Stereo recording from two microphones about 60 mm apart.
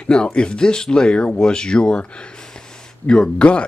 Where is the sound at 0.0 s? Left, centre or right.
Centre.